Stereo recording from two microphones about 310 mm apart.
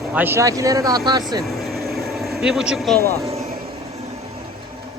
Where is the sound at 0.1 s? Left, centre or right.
Centre.